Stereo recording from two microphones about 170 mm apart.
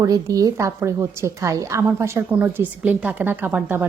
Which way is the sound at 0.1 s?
20° right (ahead or behind).